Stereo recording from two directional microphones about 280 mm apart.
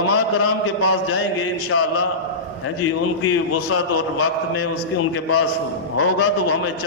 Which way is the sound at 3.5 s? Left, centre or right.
Left.